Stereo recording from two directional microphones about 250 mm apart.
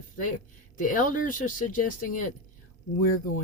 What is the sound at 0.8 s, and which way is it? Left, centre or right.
Speech, left.